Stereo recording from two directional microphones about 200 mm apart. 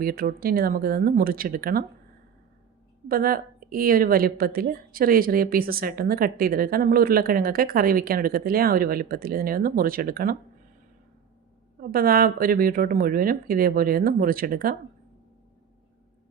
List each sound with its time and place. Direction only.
0.0 s a woman's voice: 50° right (ahead or behind)
3.1 s a woman's voice: 45° right (ahead or behind)
11.8 s a woman's voice: 45° right (ahead or behind)